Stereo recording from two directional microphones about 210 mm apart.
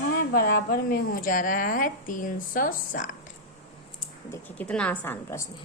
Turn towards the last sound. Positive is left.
turn(degrees=10)  # may be behind; listen again after turning